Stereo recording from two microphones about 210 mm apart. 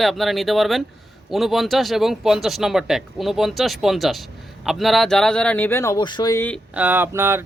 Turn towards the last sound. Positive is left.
turn(degrees=-10)  # may be behind; listen again after turning